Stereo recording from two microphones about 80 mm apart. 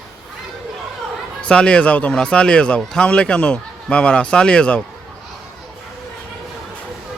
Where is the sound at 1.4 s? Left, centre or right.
Centre.